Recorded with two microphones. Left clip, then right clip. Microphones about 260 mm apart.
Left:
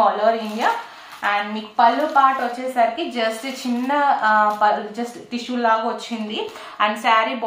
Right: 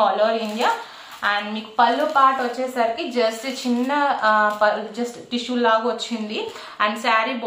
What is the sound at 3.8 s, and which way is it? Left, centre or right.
A woman's voice, centre.